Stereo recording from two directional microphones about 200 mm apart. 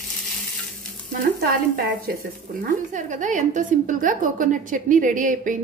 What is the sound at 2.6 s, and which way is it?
A woman's voice, 40° right (ahead or behind).